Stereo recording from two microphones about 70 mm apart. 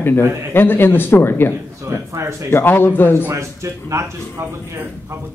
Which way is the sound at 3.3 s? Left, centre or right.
Right.